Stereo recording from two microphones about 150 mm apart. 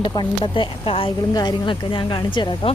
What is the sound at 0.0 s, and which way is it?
Speech, 30° left (ahead or behind).